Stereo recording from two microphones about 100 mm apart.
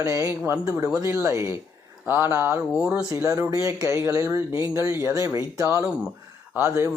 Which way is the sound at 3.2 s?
30° right (ahead or behind).